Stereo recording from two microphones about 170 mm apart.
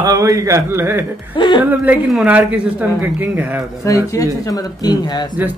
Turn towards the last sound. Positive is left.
turn(degrees=25)  # may be behind; listen again after turning